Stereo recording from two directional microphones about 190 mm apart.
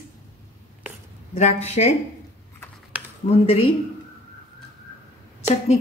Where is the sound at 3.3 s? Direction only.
35° left (ahead or behind).